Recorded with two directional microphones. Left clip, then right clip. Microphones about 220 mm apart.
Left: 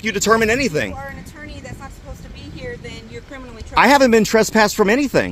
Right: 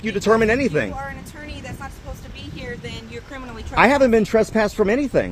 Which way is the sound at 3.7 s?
40° left (ahead or behind).